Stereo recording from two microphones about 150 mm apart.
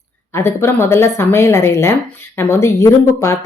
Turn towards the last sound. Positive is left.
turn(degrees=20)  # may be behind; listen again after turning